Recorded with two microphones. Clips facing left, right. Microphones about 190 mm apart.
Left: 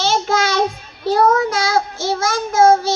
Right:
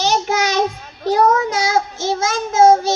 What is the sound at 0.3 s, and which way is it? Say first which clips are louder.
Child singing: even; 20° right (ahead or behind).